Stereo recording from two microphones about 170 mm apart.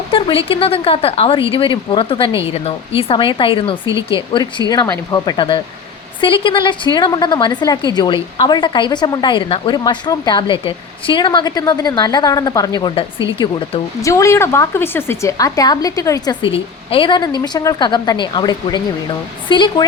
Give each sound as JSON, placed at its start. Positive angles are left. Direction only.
{"t": 0.1, "sound": "a woman's voice", "side_deg": 30}
{"t": 14.0, "sound": "a woman's voice", "side_deg": 20}